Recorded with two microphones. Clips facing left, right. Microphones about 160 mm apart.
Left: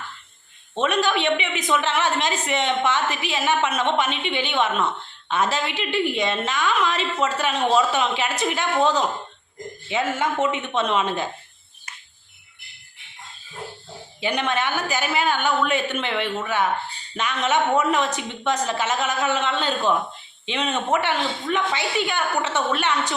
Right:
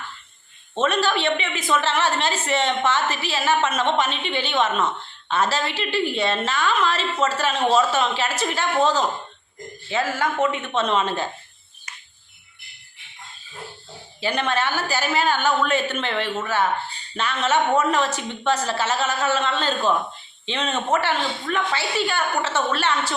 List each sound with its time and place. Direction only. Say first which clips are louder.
0.8 s a woman's voice: even; 10° left (ahead or behind)
14.2 s a woman's voice: even; 15° left (ahead or behind)